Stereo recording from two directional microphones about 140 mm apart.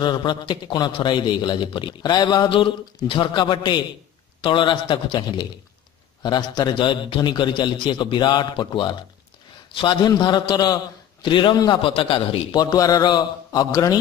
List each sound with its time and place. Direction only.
0.0 s a man's voice: 30° left (ahead or behind)
11.8 s a man's voice: 40° left (ahead or behind)